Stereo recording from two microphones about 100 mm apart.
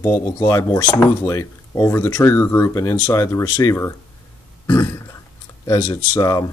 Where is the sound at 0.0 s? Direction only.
25° left (ahead or behind).